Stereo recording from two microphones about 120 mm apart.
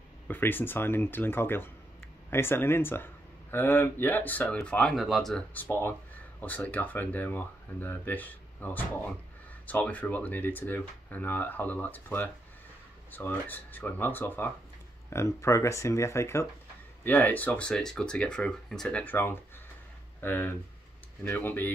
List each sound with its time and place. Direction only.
0.3 s speech: 15° left (ahead or behind)
5.5 s speech: 15° left (ahead or behind)